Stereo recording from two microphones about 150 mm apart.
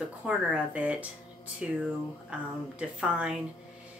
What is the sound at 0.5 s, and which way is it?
Speech, 10° right (ahead or behind).